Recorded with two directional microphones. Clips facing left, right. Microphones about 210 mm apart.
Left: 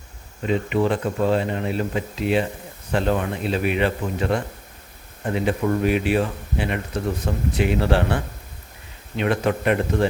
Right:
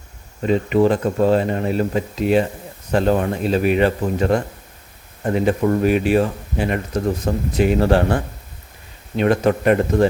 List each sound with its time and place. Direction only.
0.4 s speech: 40° right (ahead or behind)